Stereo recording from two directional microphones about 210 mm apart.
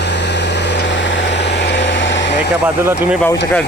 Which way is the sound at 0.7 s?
55° left (ahead or behind).